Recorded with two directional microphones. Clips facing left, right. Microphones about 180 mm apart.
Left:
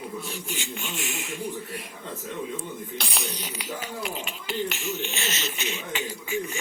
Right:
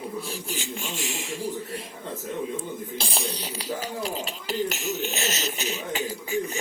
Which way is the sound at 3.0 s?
30° right (ahead or behind).